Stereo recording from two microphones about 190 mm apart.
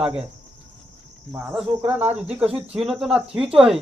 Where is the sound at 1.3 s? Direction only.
5° right (ahead or behind).